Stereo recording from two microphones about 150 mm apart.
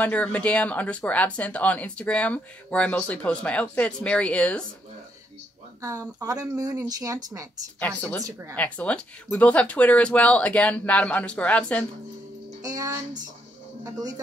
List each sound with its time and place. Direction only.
0.0 s speech: 10° left (ahead or behind)
5.8 s speech: 20° right (ahead or behind)
8.2 s speech: 20° right (ahead or behind)
8.5 s speech: 10° left (ahead or behind)
12.6 s speech: 25° right (ahead or behind)